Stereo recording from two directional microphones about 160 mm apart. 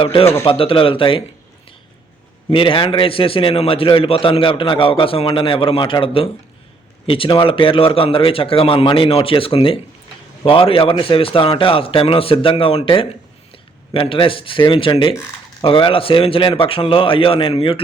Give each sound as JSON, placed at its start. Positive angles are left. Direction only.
{"t": 0.0, "sound": "a man's voice", "side_deg": 35}
{"t": 2.5, "sound": "a man's voice", "side_deg": 35}